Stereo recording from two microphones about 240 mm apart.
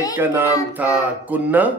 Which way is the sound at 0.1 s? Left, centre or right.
Centre.